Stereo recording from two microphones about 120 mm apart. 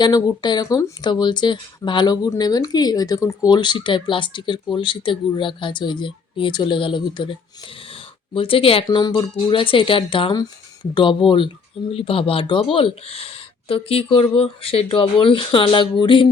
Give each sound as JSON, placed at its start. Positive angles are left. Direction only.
{"t": 0.0, "sound": "speech", "side_deg": 35}
{"t": 3.5, "sound": "speech", "side_deg": 40}